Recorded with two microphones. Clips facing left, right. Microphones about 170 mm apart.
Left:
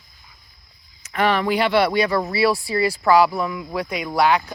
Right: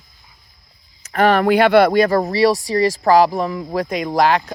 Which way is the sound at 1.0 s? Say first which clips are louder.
Right 5 dB; 45° right (ahead or behind).